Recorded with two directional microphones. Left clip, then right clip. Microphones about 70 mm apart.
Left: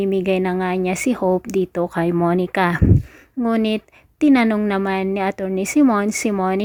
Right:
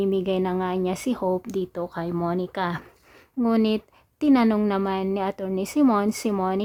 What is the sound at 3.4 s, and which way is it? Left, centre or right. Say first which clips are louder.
A woman's voice: left 3 dB; left.